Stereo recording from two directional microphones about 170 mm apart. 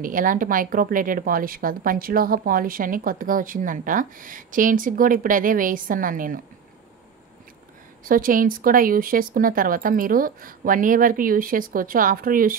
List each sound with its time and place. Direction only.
0.0 s a woman's voice: 50° right (ahead or behind)
8.0 s a woman's voice: 55° right (ahead or behind)